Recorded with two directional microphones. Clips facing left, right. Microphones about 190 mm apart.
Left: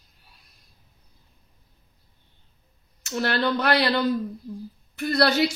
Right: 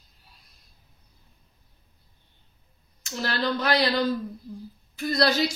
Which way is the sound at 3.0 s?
65° left (ahead or behind).